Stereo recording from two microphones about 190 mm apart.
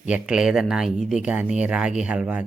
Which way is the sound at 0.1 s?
5° right (ahead or behind).